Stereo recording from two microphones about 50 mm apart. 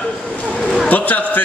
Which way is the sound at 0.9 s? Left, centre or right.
Left.